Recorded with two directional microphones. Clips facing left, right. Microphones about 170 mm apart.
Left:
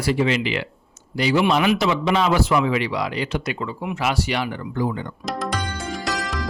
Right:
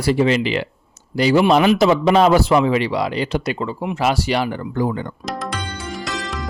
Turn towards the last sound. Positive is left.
turn(degrees=0)  # may be behind; listen again after turning